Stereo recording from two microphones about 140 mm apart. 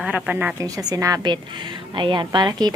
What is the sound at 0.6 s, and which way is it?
A woman's voice, 25° right (ahead or behind).